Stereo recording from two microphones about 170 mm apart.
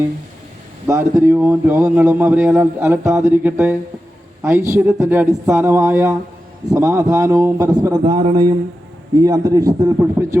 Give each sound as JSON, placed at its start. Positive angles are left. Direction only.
{"t": 0.9, "sound": "a man's voice", "side_deg": -20}